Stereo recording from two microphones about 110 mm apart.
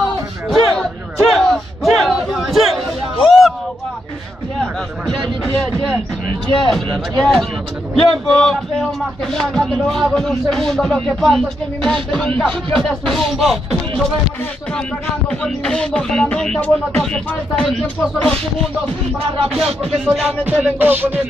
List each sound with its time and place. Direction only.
0.5 s battle cry: centre (ahead or behind)
3.3 s a sound: centre (ahead or behind)
6.4 s speech: 5° left (ahead or behind)
15.4 s speech: 5° left (ahead or behind)
20.1 s music: 10° right (ahead or behind)